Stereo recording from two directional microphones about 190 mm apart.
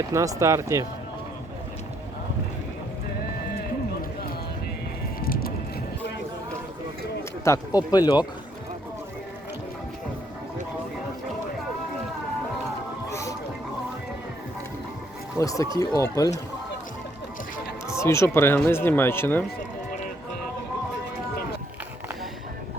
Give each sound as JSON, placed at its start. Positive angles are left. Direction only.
{"t": 0.1, "sound": "speech", "side_deg": -15}
{"t": 5.2, "sound": "music", "side_deg": 50}
{"t": 7.4, "sound": "speech", "side_deg": 15}
{"t": 13.1, "sound": "music", "side_deg": 15}
{"t": 15.4, "sound": "speech", "side_deg": 15}
{"t": 17.8, "sound": "speech", "side_deg": 15}